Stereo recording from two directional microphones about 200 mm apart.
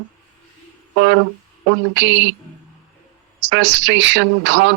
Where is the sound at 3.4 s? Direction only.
65° right (ahead or behind).